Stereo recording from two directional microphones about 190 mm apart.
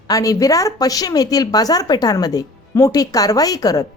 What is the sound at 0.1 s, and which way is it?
A woman's voice, 20° left (ahead or behind).